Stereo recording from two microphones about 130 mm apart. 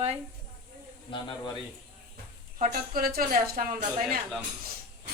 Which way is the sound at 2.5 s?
80° right.